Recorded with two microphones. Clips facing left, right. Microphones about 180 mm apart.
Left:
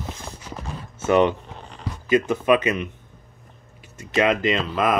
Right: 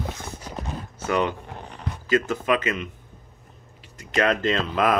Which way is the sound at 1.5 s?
60° right (ahead or behind).